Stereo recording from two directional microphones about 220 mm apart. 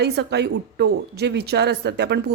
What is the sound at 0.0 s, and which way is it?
A woman's voice, 50° right (ahead or behind).